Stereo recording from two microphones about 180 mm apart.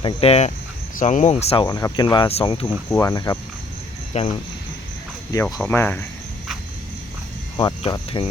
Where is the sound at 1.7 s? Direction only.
20° left (ahead or behind).